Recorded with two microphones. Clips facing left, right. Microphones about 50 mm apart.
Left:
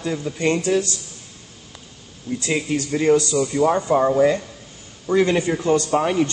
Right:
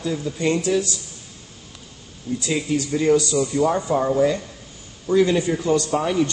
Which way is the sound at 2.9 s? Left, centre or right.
Left.